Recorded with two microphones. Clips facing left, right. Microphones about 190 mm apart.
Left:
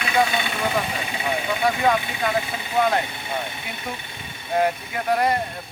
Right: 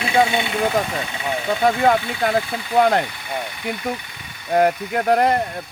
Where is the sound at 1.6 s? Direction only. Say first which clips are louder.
Right 4 dB; 50° right (ahead or behind).